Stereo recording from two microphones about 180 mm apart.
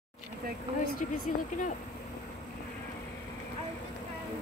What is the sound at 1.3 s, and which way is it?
Speech, 40° left (ahead or behind).